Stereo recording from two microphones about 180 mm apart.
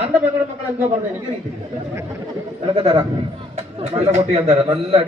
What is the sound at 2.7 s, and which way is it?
A man's voice, 30° right (ahead or behind).